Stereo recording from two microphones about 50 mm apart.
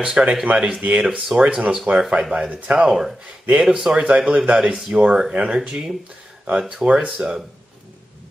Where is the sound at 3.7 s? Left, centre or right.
Centre.